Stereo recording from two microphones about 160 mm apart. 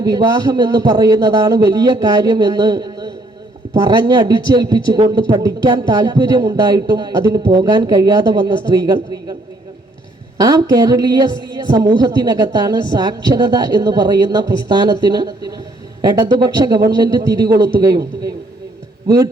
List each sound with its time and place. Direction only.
0.0 s a woman's voice: 25° right (ahead or behind)
10.3 s a woman's voice: 20° right (ahead or behind)